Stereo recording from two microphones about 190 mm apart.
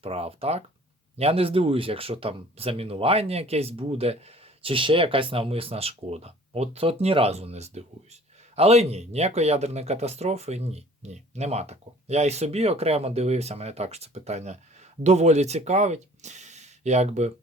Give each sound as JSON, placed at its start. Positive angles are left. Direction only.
{"t": 0.0, "sound": "speech", "side_deg": -30}